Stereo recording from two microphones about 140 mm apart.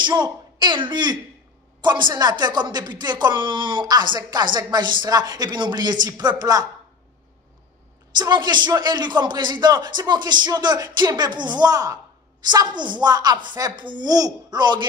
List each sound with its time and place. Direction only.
0.0 s a woman's voice: 30° right (ahead or behind)
8.2 s a woman's voice: 30° right (ahead or behind)